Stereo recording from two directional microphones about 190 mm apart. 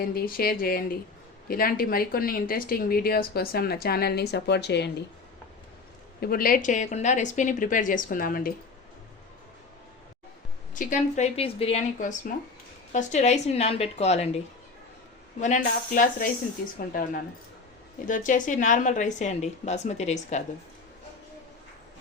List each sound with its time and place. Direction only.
0.1 s speech: 50° left (ahead or behind)
6.1 s speech: 55° left (ahead or behind)
10.8 s a woman's voice: 45° left (ahead or behind)
18.1 s a woman's voice: 45° left (ahead or behind)